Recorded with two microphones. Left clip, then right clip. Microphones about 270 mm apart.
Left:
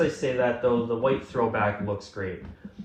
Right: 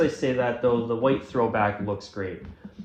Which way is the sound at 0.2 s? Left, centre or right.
Right.